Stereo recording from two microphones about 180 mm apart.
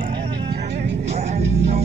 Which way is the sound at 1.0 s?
35° right (ahead or behind).